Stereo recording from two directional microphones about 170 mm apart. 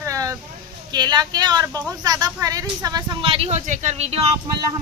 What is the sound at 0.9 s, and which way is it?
Speech, 25° right (ahead or behind).